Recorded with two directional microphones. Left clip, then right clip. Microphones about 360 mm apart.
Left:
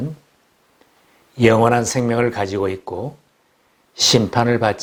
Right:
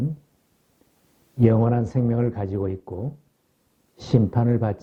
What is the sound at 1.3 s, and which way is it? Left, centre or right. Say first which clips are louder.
A man's voice: left 8 dB; centre.